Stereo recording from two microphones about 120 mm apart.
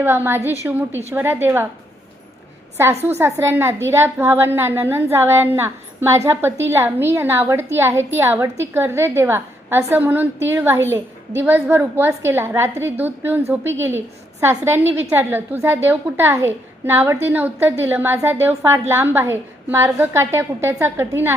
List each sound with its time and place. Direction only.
0.0 s a woman's voice: 20° right (ahead or behind)
3.2 s a woman's voice: 20° right (ahead or behind)